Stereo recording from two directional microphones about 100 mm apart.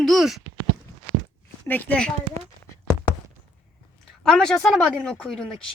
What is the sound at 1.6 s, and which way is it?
Speech, 15° left (ahead or behind).